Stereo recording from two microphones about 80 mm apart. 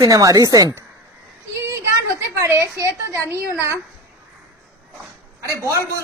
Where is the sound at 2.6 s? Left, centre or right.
Right.